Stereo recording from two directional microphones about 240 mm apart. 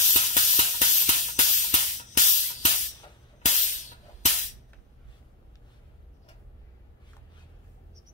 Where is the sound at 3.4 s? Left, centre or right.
Left.